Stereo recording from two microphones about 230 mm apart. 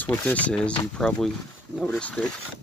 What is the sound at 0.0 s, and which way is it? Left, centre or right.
Speech, centre.